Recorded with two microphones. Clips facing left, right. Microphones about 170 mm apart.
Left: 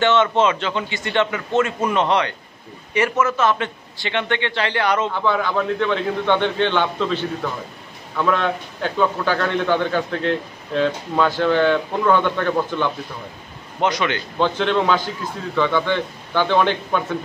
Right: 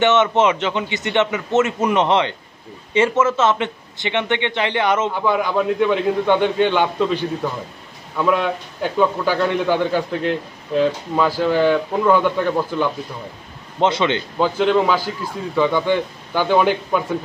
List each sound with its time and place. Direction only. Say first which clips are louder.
0.0 s a man's voice: right 1 dB; 20° right (ahead or behind)
13.7 s a man's voice: right 3 dB; 25° right (ahead or behind)
14.4 s a man's voice: right 2 dB; 5° right (ahead or behind)